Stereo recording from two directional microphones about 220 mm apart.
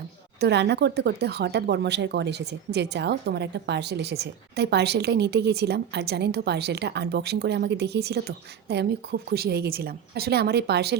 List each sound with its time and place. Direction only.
0.3 s speech: 50° right (ahead or behind)